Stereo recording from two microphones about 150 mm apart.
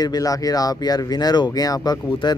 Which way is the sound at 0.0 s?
25° left (ahead or behind).